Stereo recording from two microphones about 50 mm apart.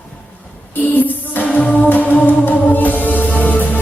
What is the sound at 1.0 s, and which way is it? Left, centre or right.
Music, left.